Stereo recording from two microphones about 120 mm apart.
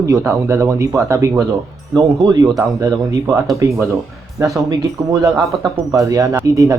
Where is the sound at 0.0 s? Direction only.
25° right (ahead or behind).